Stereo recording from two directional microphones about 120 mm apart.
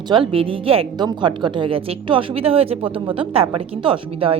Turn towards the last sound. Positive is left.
turn(degrees=-50)  # may be behind; listen again after turning